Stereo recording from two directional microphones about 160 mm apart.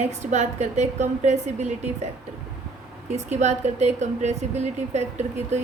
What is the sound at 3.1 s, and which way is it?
A woman's voice, 45° right (ahead or behind).